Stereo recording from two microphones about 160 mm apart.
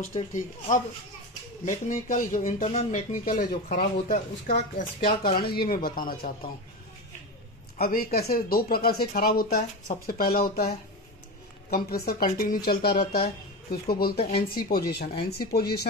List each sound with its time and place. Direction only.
0.1 s speech: 50° left (ahead or behind)
7.8 s speech: 70° left (ahead or behind)
11.7 s speech: 70° left (ahead or behind)